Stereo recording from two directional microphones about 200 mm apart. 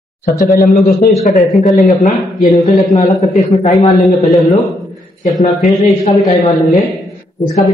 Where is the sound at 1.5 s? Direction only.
Centre (ahead or behind).